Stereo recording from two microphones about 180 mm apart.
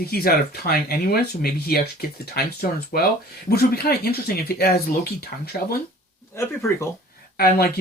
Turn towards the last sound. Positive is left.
turn(degrees=60)  # may be behind; listen again after turning